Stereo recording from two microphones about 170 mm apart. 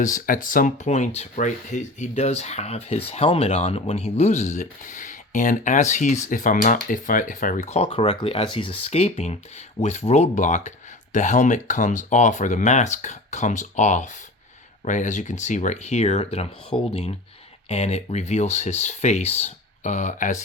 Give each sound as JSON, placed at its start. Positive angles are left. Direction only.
{"t": 0.0, "sound": "speech", "side_deg": 50}